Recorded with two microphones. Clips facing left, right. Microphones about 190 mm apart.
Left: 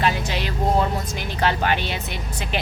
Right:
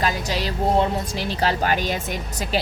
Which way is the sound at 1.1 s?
35° right (ahead or behind).